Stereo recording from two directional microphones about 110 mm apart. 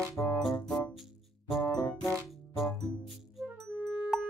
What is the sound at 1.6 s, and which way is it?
Music, 30° left (ahead or behind).